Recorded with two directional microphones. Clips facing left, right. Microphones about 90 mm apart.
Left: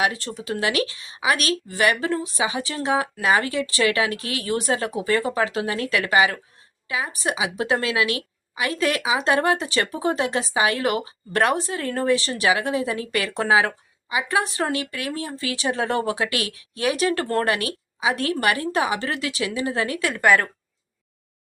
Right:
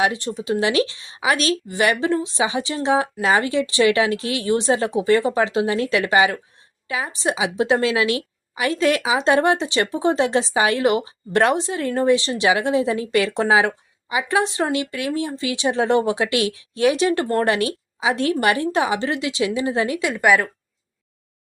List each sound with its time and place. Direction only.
0.0 s a woman's voice: 20° right (ahead or behind)